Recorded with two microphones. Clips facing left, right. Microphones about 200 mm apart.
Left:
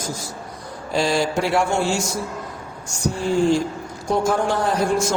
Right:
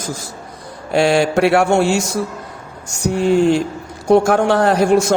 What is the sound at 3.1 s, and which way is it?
A man's voice, 70° right (ahead or behind).